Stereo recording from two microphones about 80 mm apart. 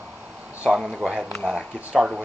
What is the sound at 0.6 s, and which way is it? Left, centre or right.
Speech, centre.